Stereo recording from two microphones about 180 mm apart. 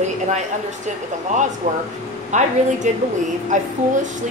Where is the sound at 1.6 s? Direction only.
40° right (ahead or behind).